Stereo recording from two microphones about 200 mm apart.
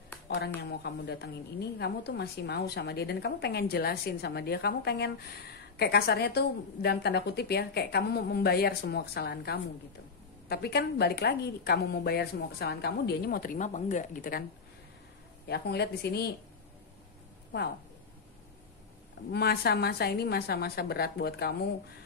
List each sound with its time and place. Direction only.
0.6 s a woman's voice: 55° left (ahead or behind)
15.4 s a woman's voice: 55° left (ahead or behind)
19.3 s a woman's voice: 50° left (ahead or behind)